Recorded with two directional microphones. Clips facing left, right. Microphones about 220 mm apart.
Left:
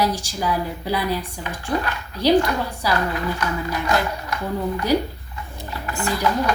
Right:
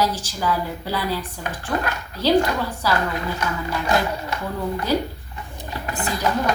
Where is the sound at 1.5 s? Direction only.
45° right (ahead or behind).